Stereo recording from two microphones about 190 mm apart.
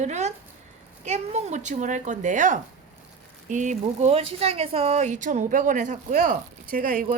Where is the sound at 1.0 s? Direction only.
35° right (ahead or behind).